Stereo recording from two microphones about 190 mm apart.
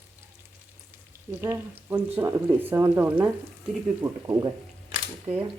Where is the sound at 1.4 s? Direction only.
15° right (ahead or behind).